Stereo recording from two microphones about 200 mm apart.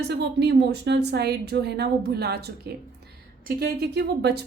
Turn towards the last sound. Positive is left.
turn(degrees=-55)  # may be behind; listen again after turning